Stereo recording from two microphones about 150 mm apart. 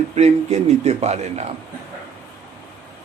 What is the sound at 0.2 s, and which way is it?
Speech, 45° right (ahead or behind).